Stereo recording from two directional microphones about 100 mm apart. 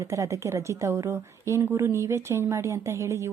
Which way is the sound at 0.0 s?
30° right (ahead or behind).